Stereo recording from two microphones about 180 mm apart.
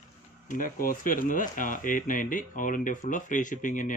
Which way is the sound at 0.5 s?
50° left (ahead or behind).